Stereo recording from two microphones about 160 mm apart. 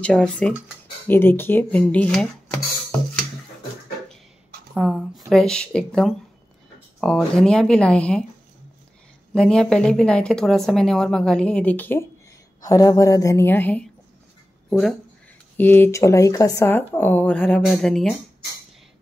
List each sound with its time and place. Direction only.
0.0 s speech: 5° left (ahead or behind)
4.7 s speech: 5° right (ahead or behind)
7.2 s speech: 5° left (ahead or behind)
9.3 s a woman's voice: 5° left (ahead or behind)
14.7 s speech: centre (ahead or behind)
15.5 s speech: 10° left (ahead or behind)